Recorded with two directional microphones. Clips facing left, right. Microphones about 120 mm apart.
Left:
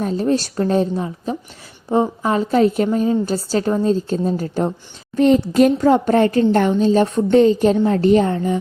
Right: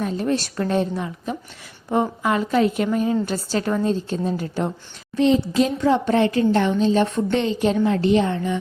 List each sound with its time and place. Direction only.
0.0 s a woman's voice: 35° left (ahead or behind)
5.1 s a woman's voice: 50° left (ahead or behind)
5.7 s a woman's voice: 40° left (ahead or behind)